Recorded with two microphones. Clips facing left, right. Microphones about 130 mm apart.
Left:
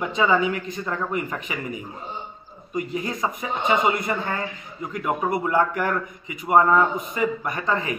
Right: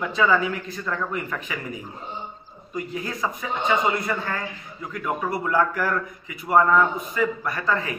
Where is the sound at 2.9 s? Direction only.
20° left (ahead or behind).